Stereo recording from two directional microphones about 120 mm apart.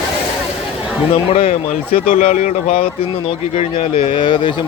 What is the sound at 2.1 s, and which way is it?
Speech, 90° left.